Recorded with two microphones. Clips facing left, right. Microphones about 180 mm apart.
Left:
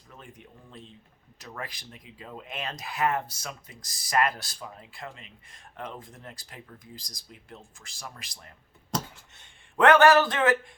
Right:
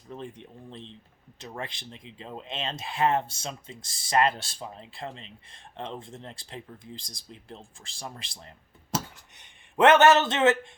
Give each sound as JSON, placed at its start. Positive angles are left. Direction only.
{"t": 0.1, "sound": "speech", "side_deg": -30}
{"t": 8.9, "sound": "a sound", "side_deg": -5}
{"t": 9.4, "sound": "speech", "side_deg": -20}